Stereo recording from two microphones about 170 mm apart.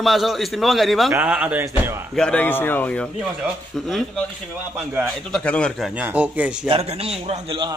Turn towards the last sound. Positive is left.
turn(degrees=-30)  # may be behind; listen again after turning